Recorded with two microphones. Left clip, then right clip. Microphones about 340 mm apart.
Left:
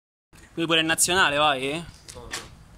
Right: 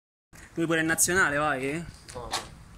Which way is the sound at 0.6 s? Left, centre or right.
Centre.